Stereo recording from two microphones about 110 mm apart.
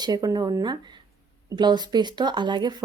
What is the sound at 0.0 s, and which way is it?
Speech, 35° right (ahead or behind).